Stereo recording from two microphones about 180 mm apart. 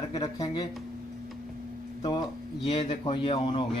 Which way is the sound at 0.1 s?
20° left (ahead or behind).